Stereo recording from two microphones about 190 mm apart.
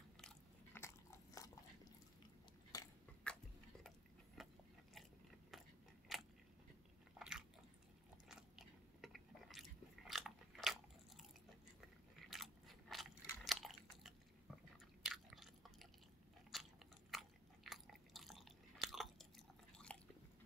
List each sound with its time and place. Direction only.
0.7 s biting: 15° left (ahead or behind)
2.7 s biting: 20° left (ahead or behind)
4.4 s a sound: centre (ahead or behind)
6.1 s biting: centre (ahead or behind)
12.3 s biting: centre (ahead or behind)
15.0 s chewing: centre (ahead or behind)
16.5 s biting: centre (ahead or behind)
17.1 s chewing: centre (ahead or behind)